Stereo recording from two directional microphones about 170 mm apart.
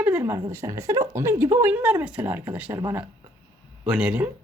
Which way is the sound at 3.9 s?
5° right (ahead or behind).